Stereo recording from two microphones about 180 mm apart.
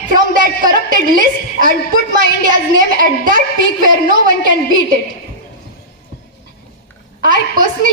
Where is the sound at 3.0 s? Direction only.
50° right (ahead or behind).